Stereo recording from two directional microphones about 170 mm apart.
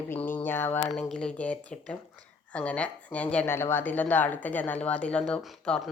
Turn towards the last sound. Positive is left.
turn(degrees=0)  # may be behind; listen again after turning